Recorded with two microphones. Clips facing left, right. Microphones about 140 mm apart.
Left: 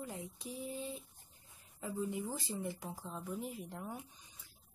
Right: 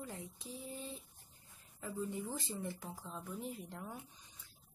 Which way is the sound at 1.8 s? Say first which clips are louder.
Left 2 dB; 10° left (ahead or behind).